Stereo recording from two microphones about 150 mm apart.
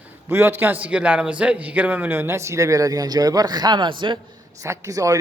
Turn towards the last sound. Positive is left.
turn(degrees=-20)  # may be behind; listen again after turning